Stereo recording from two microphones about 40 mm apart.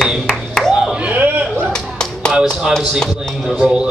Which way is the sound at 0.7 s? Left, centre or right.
Centre.